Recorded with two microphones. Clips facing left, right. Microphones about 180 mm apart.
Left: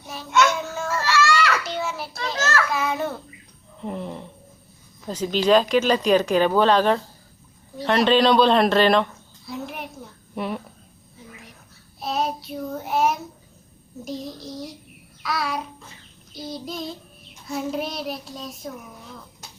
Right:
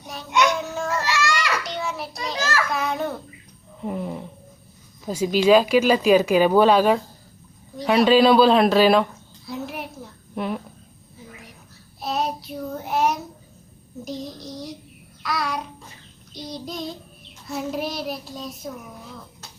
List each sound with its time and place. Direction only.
0.3 s child singing: 15° right (ahead or behind)
0.6 s baby cry: centre (ahead or behind)
0.9 s children playing: 15° right (ahead or behind)
1.6 s child singing: centre (ahead or behind)
2.2 s a sound: centre (ahead or behind)
3.8 s child singing: 5° right (ahead or behind)
5.0 s speech: 10° right (ahead or behind)
7.8 s child singing: 5° right (ahead or behind)
9.5 s a sound: centre (ahead or behind)
11.9 s child singing: centre (ahead or behind)